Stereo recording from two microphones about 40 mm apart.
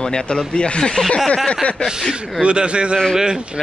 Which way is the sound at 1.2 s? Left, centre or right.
Centre.